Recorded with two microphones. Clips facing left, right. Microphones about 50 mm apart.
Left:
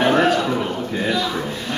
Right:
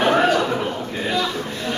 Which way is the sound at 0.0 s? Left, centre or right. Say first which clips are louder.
Even; centre.